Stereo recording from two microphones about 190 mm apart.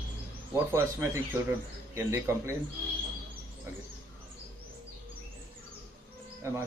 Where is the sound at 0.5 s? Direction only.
10° right (ahead or behind).